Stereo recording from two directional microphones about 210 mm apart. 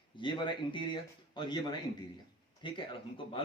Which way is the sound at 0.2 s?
20° left (ahead or behind).